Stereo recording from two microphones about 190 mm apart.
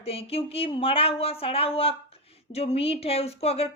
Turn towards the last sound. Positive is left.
turn(degrees=30)  # may be behind; listen again after turning